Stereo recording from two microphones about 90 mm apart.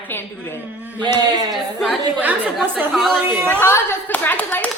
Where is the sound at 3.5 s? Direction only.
25° left (ahead or behind).